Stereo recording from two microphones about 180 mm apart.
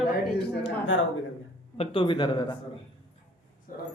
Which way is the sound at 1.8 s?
30° left (ahead or behind).